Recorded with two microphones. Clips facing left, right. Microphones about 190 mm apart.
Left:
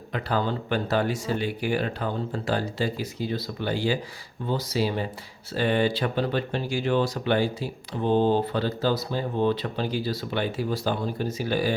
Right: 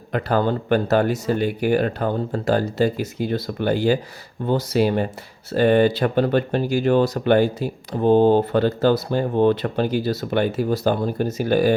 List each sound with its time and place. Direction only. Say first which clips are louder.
0.1 s speech: right 6 dB; 50° right (ahead or behind)